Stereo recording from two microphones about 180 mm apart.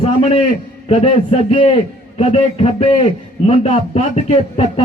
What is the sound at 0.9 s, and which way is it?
A man's voice, 35° left (ahead or behind).